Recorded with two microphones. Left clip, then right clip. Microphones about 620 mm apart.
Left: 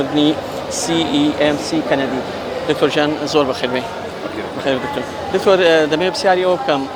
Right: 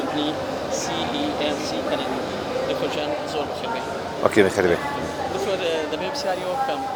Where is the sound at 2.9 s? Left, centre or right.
Left.